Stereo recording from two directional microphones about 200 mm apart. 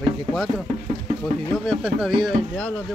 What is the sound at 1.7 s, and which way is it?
Speech, 5° right (ahead or behind).